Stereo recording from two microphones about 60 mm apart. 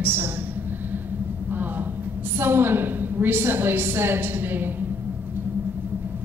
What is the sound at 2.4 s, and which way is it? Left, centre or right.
A woman's voice, right.